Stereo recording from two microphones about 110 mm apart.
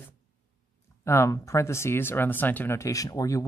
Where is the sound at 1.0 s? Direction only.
25° left (ahead or behind).